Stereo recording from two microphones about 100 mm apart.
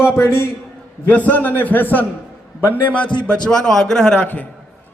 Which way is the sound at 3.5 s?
5° left (ahead or behind).